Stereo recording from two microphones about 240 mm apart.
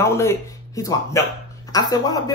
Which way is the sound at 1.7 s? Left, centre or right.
Centre.